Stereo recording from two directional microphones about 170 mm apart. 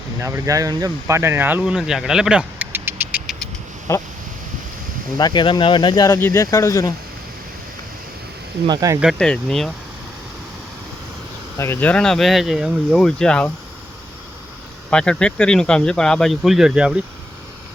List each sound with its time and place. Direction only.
0.2 s speech: 20° right (ahead or behind)
3.9 s a sound: 15° left (ahead or behind)
5.1 s speech: 25° left (ahead or behind)
8.6 s speech: 20° right (ahead or behind)
9.0 s speech: centre (ahead or behind)
11.5 s speech: 15° left (ahead or behind)
14.8 s speech: 5° left (ahead or behind)